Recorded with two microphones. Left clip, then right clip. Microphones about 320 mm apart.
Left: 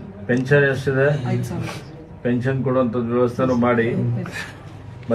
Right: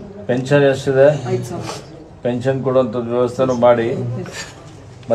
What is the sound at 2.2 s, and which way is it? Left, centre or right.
A man's voice, right.